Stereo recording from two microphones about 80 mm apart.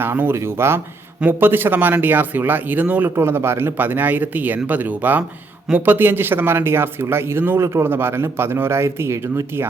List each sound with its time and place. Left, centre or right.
0.0 s speech: right
3.2 s speech: right